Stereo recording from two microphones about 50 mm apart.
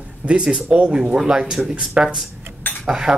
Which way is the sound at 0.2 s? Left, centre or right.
Right.